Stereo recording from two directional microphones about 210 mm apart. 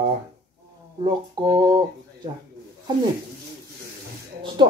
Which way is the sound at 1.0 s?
20° right (ahead or behind).